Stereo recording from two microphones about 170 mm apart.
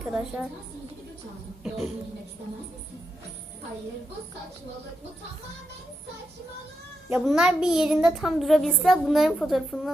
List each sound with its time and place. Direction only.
0.0 s a woman's voice: 5° right (ahead or behind)
7.1 s speech: 5° right (ahead or behind)